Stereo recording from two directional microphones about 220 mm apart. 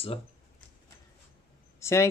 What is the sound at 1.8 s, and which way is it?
Speech, 10° left (ahead or behind).